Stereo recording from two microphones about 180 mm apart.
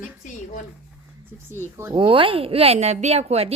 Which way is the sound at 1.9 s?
30° right (ahead or behind).